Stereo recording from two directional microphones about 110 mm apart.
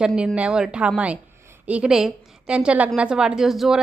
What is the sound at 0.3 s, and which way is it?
A woman's voice, 10° right (ahead or behind).